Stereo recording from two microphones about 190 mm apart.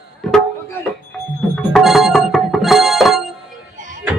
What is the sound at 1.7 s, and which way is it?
Music, centre (ahead or behind).